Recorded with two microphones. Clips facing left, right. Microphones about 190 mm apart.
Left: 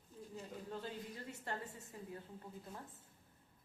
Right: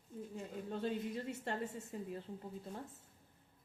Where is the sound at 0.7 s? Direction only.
25° right (ahead or behind).